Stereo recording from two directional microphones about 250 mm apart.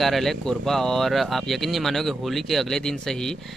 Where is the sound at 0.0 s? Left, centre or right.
Centre.